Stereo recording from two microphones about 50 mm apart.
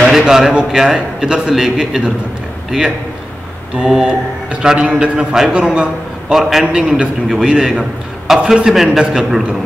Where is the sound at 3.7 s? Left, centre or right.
Centre.